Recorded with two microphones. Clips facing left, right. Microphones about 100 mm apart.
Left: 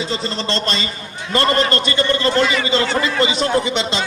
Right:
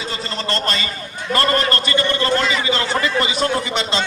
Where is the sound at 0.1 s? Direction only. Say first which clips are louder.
Left 2 dB; 25° left (ahead or behind).